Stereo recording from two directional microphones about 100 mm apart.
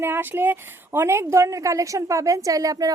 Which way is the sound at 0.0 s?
20° right (ahead or behind).